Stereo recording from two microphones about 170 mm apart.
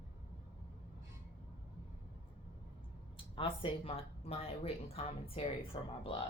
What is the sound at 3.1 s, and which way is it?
Speech, 30° left (ahead or behind).